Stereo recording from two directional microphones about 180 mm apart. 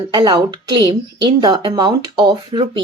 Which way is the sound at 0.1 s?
25° right (ahead or behind).